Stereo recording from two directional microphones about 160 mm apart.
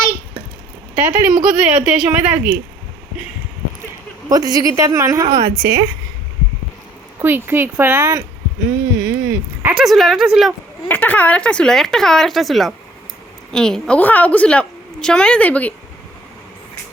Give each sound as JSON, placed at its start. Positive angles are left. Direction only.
{"t": 0.9, "sound": "speech", "side_deg": -5}
{"t": 4.3, "sound": "a woman's voice", "side_deg": -20}
{"t": 7.2, "sound": "speech", "side_deg": -15}
{"t": 8.7, "sound": "a sound", "side_deg": -10}
{"t": 10.8, "sound": "a woman's voice", "side_deg": 10}